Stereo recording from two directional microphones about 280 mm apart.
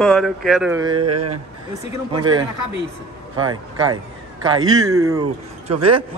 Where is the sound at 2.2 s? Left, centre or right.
Centre.